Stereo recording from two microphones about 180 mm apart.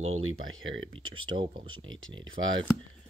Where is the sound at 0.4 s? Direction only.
90° right.